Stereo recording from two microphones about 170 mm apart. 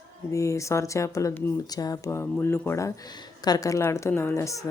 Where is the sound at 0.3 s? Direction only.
20° left (ahead or behind).